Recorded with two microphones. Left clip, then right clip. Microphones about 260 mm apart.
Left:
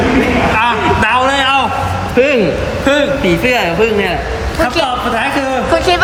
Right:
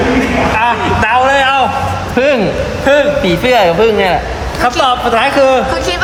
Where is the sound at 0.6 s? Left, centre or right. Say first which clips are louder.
Even; right.